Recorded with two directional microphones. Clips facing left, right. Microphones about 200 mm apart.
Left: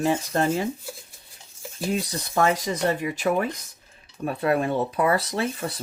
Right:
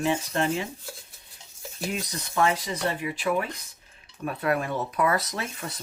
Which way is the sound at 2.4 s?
45° left (ahead or behind).